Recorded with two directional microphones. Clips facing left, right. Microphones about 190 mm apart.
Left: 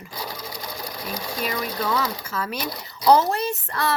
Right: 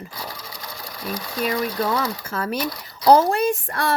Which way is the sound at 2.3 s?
50° right (ahead or behind).